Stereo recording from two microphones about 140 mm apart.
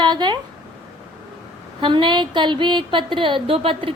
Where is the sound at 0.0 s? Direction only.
30° right (ahead or behind).